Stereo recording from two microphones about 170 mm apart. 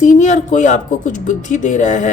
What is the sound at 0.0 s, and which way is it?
Speech, 45° left (ahead or behind).